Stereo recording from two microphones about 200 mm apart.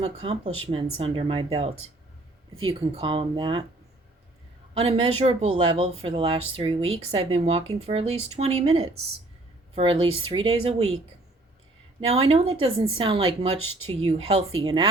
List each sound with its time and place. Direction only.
0.0 s speech: 30° right (ahead or behind)
4.8 s speech: 30° right (ahead or behind)